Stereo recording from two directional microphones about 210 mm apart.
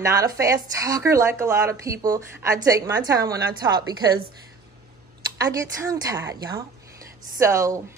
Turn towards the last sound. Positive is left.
turn(degrees=-15)  # may be behind; listen again after turning